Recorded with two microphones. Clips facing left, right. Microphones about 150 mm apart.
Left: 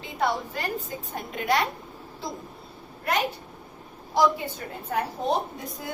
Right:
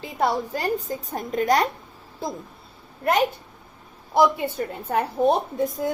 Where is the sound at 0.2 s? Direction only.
35° right (ahead or behind).